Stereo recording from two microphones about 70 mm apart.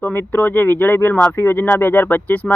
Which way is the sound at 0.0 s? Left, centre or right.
Left.